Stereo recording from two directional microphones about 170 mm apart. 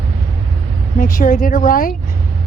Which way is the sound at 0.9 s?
55° left (ahead or behind).